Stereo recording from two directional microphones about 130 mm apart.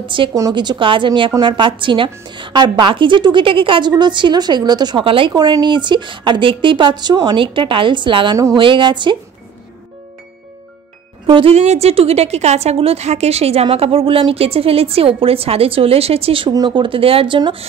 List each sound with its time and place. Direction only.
0.0 s a woman's voice: 40° right (ahead or behind)
0.3 s a woman's voice: 25° right (ahead or behind); by 5.3 s 45° right (ahead or behind)
5.3 s a woman's voice: 30° right (ahead or behind)
11.2 s speech: 40° right (ahead or behind)
11.5 s a woman's voice: 55° right (ahead or behind)